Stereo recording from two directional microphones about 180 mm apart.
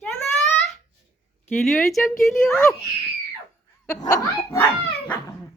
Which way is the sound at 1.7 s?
Centre (ahead or behind).